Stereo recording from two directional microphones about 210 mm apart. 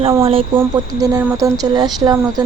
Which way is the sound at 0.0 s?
25° right (ahead or behind).